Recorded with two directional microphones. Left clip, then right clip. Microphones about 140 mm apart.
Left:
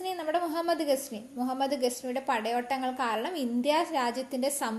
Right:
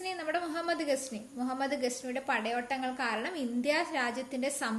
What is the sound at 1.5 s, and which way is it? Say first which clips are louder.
A woman's voice: left 4 dB; 35° left (ahead or behind).